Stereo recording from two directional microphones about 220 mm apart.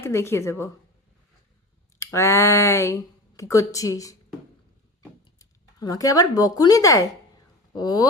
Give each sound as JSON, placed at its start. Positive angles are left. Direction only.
{"t": 0.0, "sound": "speech", "side_deg": 10}
{"t": 2.0, "sound": "speech", "side_deg": 10}
{"t": 5.2, "sound": "speech", "side_deg": 15}